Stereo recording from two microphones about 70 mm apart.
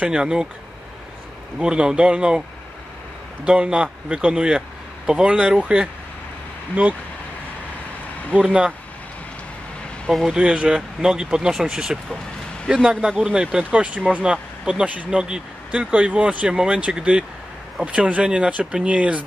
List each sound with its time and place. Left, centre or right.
0.0 s speech: centre
1.6 s speech: centre
3.4 s speech: centre
8.3 s speech: centre
10.2 s speech: centre
13.2 s speech: centre